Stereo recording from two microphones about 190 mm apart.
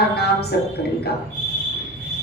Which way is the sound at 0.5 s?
55° left (ahead or behind).